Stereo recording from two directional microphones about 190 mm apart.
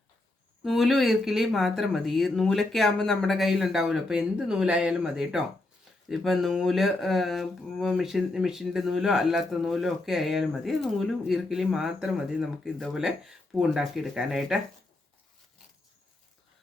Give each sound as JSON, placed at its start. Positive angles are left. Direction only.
{"t": 0.6, "sound": "speech", "side_deg": 0}